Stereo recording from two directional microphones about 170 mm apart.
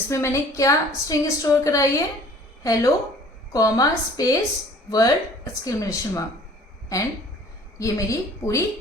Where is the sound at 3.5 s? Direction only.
20° left (ahead or behind).